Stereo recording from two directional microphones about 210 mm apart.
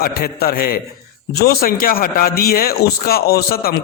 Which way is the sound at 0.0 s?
45° left (ahead or behind).